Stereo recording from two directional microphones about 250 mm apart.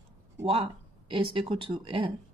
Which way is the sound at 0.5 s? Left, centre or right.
Right.